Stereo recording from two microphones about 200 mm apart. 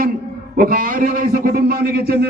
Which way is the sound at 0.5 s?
45° right (ahead or behind).